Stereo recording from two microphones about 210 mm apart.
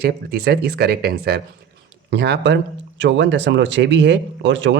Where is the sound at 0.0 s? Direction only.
50° right (ahead or behind).